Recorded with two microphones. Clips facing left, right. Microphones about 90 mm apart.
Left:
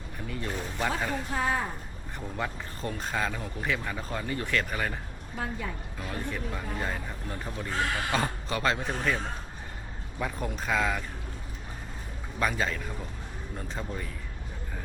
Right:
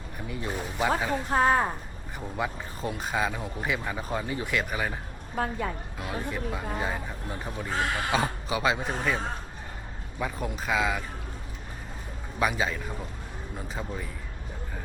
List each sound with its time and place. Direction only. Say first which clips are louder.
0.3 s speech: right 1 dB; 10° right (ahead or behind)
1.3 s a woman's voice: right 9 dB; 50° right (ahead or behind)
2.3 s speech: right 3 dB; 15° right (ahead or behind)
5.3 s a woman's voice: right 5 dB; 45° right (ahead or behind)
6.0 s speech: right 2 dB; 10° right (ahead or behind)
12.4 s speech: right 2 dB; 10° right (ahead or behind)